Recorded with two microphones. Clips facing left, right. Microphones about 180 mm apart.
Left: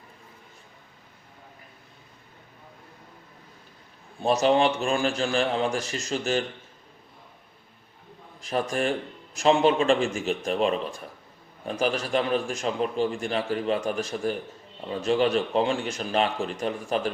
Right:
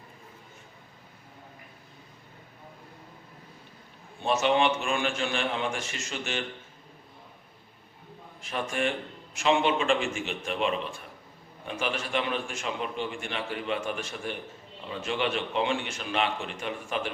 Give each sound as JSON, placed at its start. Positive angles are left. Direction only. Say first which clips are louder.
{"t": 4.2, "sound": "a man's voice", "louder": "left 3 dB", "side_deg": 35}
{"t": 8.4, "sound": "a man's voice", "louder": "left 4 dB", "side_deg": 40}